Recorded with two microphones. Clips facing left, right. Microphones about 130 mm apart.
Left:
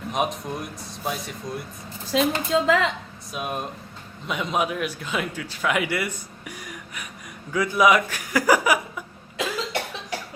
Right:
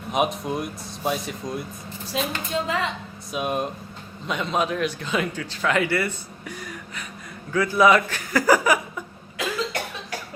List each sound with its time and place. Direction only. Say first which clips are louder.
0.1 s speech: right 3 dB; 5° right (ahead or behind)
2.1 s a woman's voice: left 5 dB; 90° left
3.3 s speech: right 4 dB; centre (ahead or behind)
4.3 s a man's voice: right 1 dB; 10° left (ahead or behind)